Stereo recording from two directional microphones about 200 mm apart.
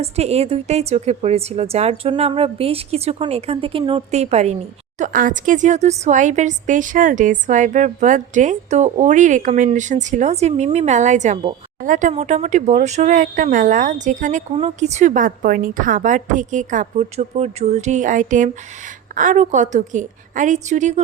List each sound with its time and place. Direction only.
0.0 s speech: 30° right (ahead or behind)